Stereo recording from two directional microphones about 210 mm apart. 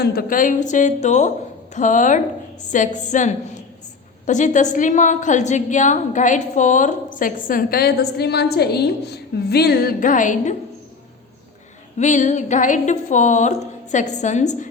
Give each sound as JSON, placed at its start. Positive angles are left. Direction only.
{"t": 0.0, "sound": "a woman's voice", "side_deg": 45}
{"t": 11.9, "sound": "a woman's voice", "side_deg": 35}